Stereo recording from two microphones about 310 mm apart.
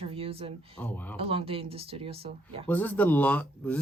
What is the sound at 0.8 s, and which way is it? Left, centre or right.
Speech, centre.